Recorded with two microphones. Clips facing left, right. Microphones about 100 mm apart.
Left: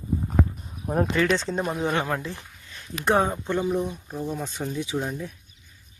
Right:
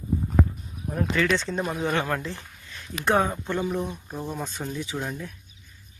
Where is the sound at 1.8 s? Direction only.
15° left (ahead or behind).